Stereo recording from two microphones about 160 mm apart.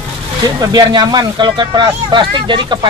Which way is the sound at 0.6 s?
25° right (ahead or behind).